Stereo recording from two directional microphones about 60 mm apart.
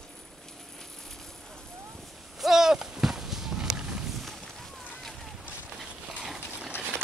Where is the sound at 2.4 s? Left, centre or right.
Centre.